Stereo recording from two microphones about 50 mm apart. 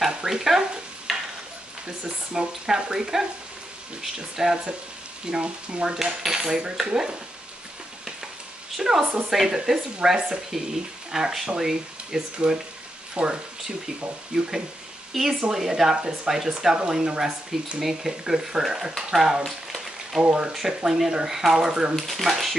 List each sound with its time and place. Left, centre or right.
0.0 s dog: centre
1.9 s speech: centre
8.7 s speech: centre
15.1 s speech: centre
19.4 s frying: centre
20.2 s speech: centre
21.9 s speech: centre